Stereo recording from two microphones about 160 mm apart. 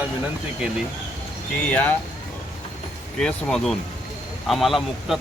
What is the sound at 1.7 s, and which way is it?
Speech, 10° left (ahead or behind).